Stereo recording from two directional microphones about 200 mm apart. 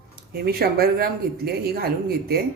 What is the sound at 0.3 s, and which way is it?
Speech, 50° right (ahead or behind).